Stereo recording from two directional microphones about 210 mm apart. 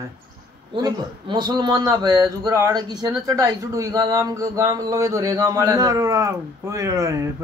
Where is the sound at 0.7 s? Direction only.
20° right (ahead or behind).